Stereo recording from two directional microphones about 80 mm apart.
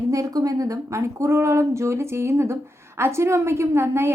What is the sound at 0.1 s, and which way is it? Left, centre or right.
A woman's voice, right.